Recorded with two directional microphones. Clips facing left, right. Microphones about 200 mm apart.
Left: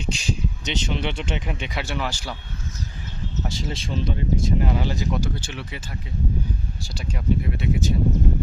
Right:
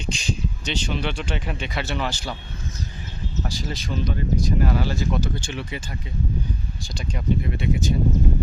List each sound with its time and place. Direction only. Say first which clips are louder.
0.0 s speech: left 1 dB; 5° left (ahead or behind)
0.6 s speech: even; 20° left (ahead or behind)
3.5 s speech: even; 25° left (ahead or behind); by 5.8 s 5° left (ahead or behind)
6.8 s speech: even; 5° left (ahead or behind)